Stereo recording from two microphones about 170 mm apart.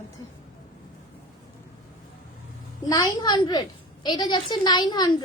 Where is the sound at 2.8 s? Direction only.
20° left (ahead or behind).